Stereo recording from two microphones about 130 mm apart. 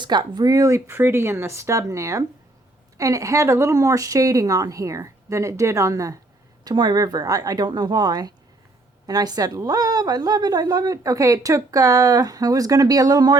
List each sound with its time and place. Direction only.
0.0 s a woman's voice: 35° right (ahead or behind)